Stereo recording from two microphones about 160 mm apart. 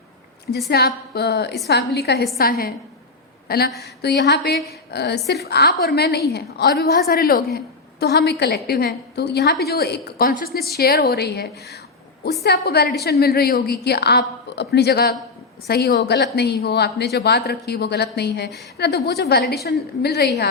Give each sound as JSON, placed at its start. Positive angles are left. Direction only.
{"t": 0.7, "sound": "a woman's voice", "side_deg": 80}
{"t": 2.4, "sound": "a woman's voice", "side_deg": 65}
{"t": 4.0, "sound": "speech", "side_deg": 90}
{"t": 7.1, "sound": "a woman's voice", "side_deg": 70}